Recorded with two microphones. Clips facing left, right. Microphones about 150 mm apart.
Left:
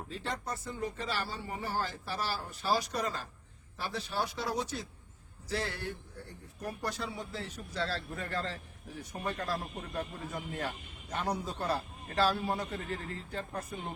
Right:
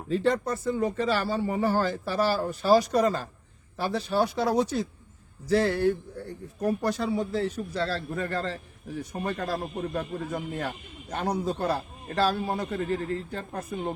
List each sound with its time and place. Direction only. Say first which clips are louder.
0.1 s a man's voice: right 15 dB; 65° right (ahead or behind); by 13.9 s 50° right (ahead or behind)